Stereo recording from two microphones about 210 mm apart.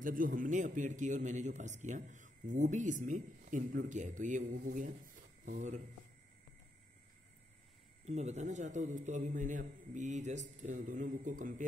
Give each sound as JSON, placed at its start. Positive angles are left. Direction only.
{"t": 0.0, "sound": "a man's voice", "side_deg": -40}
{"t": 8.0, "sound": "a man's voice", "side_deg": -30}